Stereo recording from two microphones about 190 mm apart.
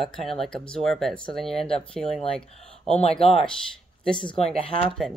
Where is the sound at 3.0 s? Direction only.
30° left (ahead or behind).